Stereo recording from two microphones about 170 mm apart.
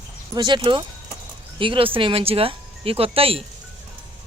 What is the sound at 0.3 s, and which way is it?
Speech, 30° right (ahead or behind).